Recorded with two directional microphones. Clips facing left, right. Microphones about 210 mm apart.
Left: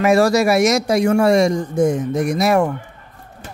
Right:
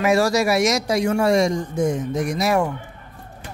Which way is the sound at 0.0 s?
55° left (ahead or behind).